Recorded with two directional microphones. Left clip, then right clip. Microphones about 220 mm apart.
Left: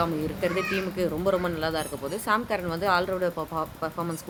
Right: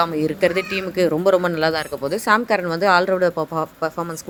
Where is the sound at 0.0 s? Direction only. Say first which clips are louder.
Right 9 dB; 30° right (ahead or behind).